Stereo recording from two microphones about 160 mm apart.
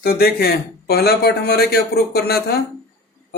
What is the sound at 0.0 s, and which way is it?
A man's voice, 70° left (ahead or behind).